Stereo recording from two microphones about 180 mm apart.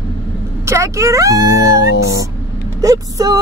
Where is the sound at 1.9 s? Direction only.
75° left (ahead or behind).